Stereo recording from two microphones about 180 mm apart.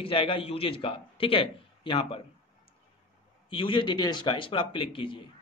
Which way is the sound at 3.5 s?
30° left (ahead or behind).